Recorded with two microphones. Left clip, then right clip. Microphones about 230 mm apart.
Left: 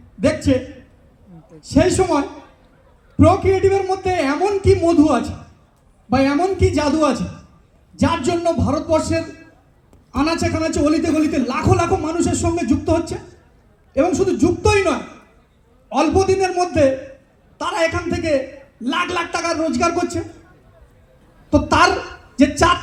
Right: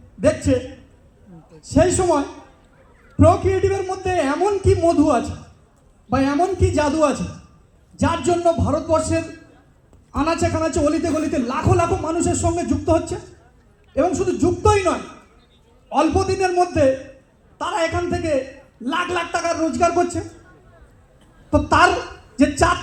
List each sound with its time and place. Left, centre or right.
0.2 s a man's voice: centre
1.6 s a man's voice: centre
21.5 s a woman's voice: centre